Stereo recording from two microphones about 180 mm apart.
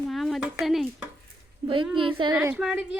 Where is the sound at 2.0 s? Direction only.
30° right (ahead or behind).